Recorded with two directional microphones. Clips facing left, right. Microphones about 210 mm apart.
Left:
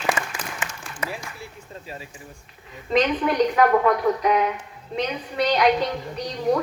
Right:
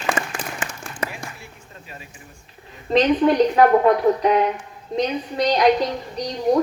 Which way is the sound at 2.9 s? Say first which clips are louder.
Right 5 dB; 30° right (ahead or behind).